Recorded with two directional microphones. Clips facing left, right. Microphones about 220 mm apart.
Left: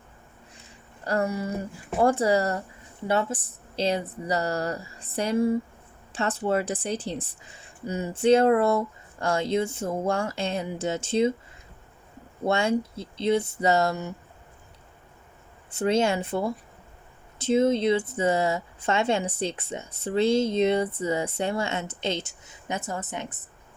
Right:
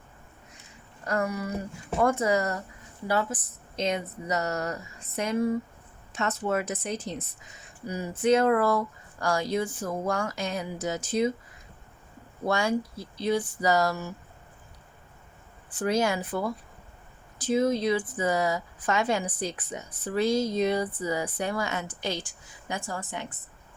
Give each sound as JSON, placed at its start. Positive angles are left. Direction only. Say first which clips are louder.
{"t": 1.0, "sound": "speech", "louder": "left 2 dB", "side_deg": 30}
{"t": 12.5, "sound": "speech", "louder": "left 2 dB", "side_deg": 25}
{"t": 15.7, "sound": "speech", "louder": "left 3 dB", "side_deg": 25}